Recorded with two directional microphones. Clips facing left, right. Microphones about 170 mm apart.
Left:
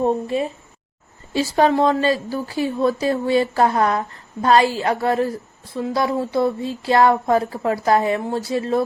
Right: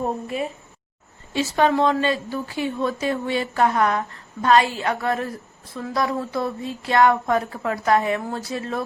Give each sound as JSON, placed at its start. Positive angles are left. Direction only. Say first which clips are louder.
{"t": 0.0, "sound": "a woman's voice", "louder": "left 6 dB", "side_deg": 30}